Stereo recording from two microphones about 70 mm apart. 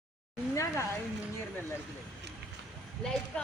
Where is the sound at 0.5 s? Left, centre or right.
Left.